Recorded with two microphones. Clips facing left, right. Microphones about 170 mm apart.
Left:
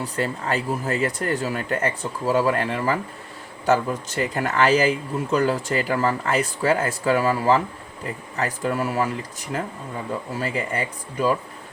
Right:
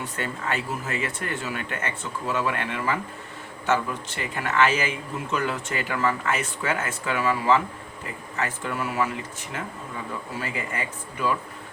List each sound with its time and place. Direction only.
0.0 s speech: 35° left (ahead or behind)
10.3 s speech: 35° left (ahead or behind)